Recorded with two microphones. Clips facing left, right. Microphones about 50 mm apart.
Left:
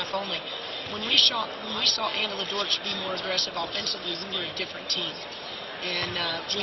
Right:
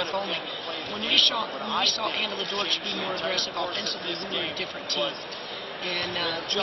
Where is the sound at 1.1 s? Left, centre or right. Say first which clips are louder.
Even; centre.